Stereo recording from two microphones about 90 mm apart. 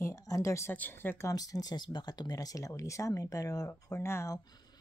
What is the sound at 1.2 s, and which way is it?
Speech, 40° left (ahead or behind).